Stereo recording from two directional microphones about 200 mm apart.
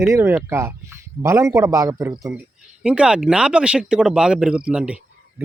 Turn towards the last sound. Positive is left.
turn(degrees=-5)  # may be behind; listen again after turning